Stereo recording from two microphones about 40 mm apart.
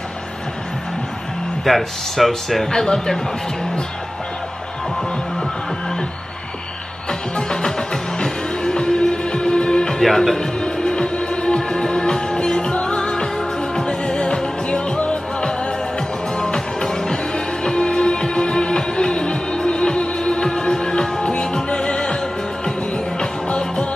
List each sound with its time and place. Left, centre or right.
1.6 s speech: centre
2.7 s speech: centre
7.1 s music: centre
10.0 s music: centre; by 23.9 s left